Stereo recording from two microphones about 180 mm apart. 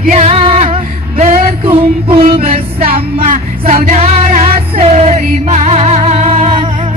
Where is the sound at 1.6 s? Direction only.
30° right (ahead or behind).